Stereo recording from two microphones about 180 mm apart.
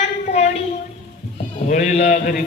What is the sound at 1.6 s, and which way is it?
Speech, 45° left (ahead or behind).